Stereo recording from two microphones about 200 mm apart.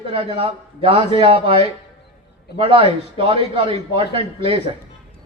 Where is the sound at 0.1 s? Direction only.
30° right (ahead or behind).